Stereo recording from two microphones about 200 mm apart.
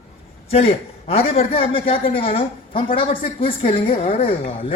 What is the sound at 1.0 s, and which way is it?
A woman's voice, 30° left (ahead or behind).